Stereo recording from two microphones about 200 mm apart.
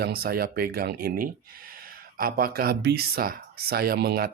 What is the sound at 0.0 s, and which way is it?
Speech, 50° right (ahead or behind).